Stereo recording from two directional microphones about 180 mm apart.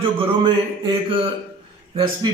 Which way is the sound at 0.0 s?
30° right (ahead or behind).